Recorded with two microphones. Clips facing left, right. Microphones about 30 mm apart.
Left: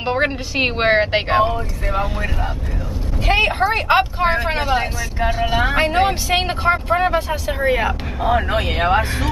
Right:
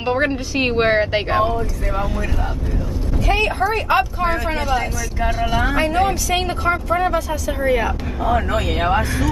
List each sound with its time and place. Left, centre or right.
0.0 s speech: centre
3.3 s speech: left
5.2 s speech: left